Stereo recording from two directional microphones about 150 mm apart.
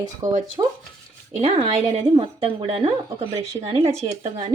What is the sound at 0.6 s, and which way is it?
Speech, 35° right (ahead or behind).